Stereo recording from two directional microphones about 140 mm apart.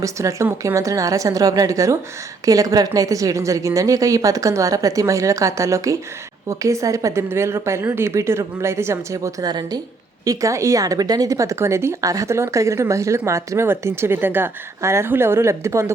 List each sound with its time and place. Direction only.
0.0 s speech: 20° right (ahead or behind)